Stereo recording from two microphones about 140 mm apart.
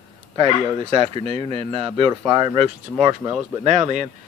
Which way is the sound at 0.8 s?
45° right (ahead or behind).